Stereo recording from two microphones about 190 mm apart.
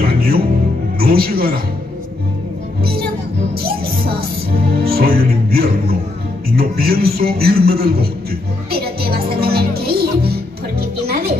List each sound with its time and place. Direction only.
0.0 s music: 55° right (ahead or behind)
0.9 s a man's voice: 55° right (ahead or behind)
2.8 s music: 55° right (ahead or behind)
6.5 s a man's voice: 55° right (ahead or behind)
8.6 s music: 55° right (ahead or behind)